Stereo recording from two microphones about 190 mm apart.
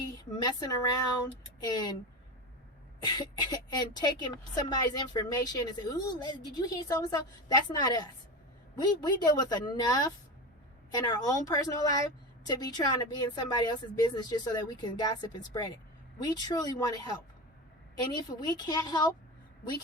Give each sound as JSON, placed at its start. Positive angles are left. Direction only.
{"t": 0.4, "sound": "speech", "side_deg": 20}
{"t": 3.0, "sound": "speech", "side_deg": 20}